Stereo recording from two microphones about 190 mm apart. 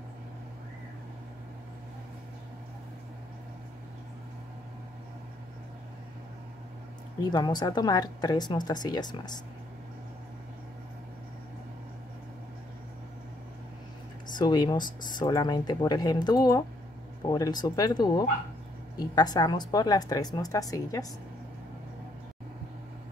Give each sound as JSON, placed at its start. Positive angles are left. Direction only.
{"t": 7.3, "sound": "speech", "side_deg": 20}
{"t": 14.2, "sound": "speech", "side_deg": 20}